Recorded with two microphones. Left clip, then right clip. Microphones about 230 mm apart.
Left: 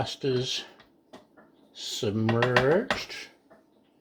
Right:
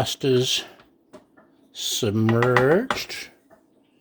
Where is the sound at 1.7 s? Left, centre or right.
Right.